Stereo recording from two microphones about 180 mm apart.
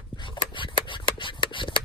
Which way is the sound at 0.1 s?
25° left (ahead or behind).